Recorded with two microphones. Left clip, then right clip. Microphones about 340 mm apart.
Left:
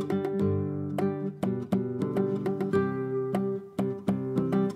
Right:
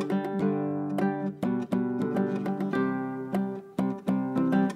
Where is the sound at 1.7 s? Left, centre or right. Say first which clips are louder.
Left 1 dB; right.